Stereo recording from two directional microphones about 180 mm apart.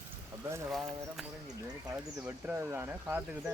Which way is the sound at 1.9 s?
15° right (ahead or behind).